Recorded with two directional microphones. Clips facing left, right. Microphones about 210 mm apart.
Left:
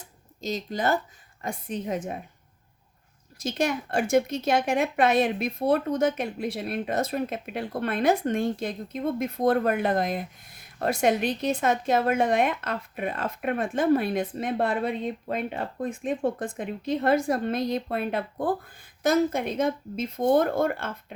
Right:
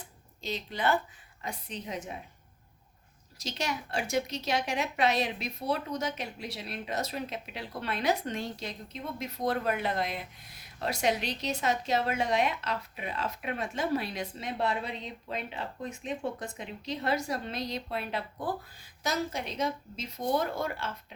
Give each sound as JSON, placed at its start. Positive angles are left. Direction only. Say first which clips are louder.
{"t": 0.4, "sound": "a woman's voice", "louder": "left 4 dB", "side_deg": 40}
{"t": 3.3, "sound": "a woman's voice", "louder": "left 8 dB", "side_deg": 50}